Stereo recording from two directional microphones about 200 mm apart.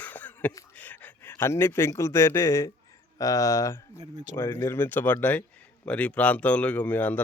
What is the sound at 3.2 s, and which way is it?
Speech, 15° left (ahead or behind).